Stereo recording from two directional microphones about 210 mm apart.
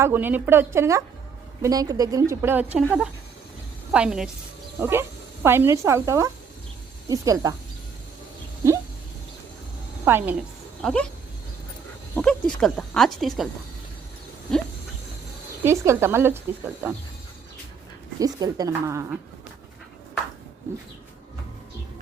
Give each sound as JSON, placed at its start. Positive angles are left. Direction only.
{"t": 0.0, "sound": "a woman's voice", "side_deg": -10}
{"t": 10.0, "sound": "a woman's voice", "side_deg": -10}
{"t": 12.1, "sound": "speech", "side_deg": 5}
{"t": 15.6, "sound": "a woman's voice", "side_deg": -15}
{"t": 18.2, "sound": "a woman's voice", "side_deg": -20}